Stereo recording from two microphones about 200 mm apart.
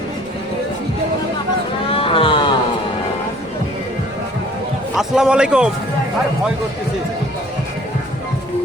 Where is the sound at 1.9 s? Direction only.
25° left (ahead or behind).